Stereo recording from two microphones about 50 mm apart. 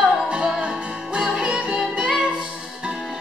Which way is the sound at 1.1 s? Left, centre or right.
Centre.